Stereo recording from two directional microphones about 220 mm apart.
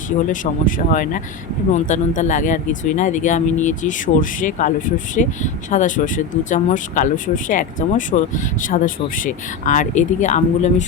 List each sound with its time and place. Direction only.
0.3 s speech: 35° left (ahead or behind)